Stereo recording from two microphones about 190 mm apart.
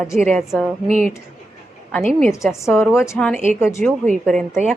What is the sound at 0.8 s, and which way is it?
Speech, 35° right (ahead or behind).